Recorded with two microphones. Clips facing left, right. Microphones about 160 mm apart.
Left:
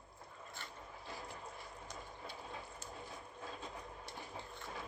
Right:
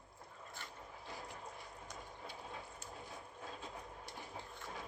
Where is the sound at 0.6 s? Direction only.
10° right (ahead or behind).